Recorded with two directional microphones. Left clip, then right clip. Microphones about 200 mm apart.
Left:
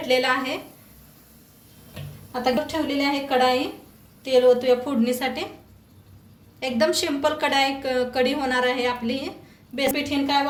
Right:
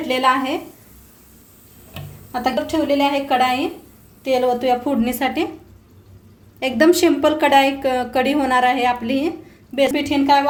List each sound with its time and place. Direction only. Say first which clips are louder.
0.1 s a woman's voice: right 4 dB; 40° right (ahead or behind)
2.4 s speech: right 3 dB; 55° right (ahead or behind)
6.6 s speech: right 7 dB; 45° right (ahead or behind)